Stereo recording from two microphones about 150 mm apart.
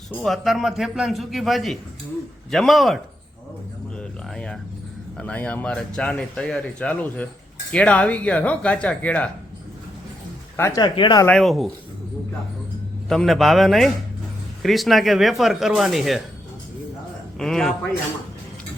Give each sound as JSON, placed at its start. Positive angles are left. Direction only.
{"t": 0.1, "sound": "a man's voice", "side_deg": 0}
{"t": 3.9, "sound": "music", "side_deg": 5}
{"t": 5.1, "sound": "speech", "side_deg": 10}
{"t": 10.6, "sound": "speech", "side_deg": 25}
{"t": 11.3, "sound": "a man's voice", "side_deg": 0}
{"t": 13.1, "sound": "a man's voice", "side_deg": 0}
{"t": 17.3, "sound": "a man's voice", "side_deg": 5}